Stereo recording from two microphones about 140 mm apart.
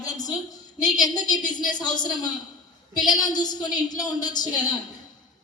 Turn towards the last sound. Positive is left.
turn(degrees=30)  # may be behind; listen again after turning